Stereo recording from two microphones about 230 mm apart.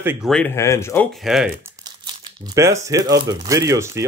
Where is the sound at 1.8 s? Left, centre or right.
Centre.